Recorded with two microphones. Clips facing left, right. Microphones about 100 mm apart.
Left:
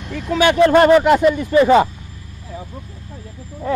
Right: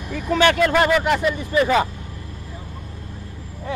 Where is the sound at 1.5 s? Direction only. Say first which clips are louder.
Left 6 dB; 30° left (ahead or behind).